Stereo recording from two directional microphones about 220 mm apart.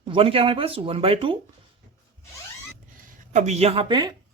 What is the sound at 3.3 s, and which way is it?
Speech, 30° right (ahead or behind).